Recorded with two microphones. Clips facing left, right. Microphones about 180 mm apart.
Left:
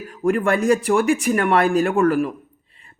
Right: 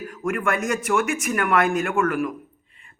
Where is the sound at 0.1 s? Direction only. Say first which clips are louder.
Left 6 dB; 30° left (ahead or behind).